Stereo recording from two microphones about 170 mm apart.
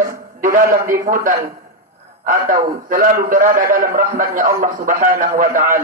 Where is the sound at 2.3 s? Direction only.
55° right (ahead or behind).